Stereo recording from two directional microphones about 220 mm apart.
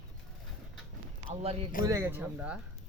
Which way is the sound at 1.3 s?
25° right (ahead or behind).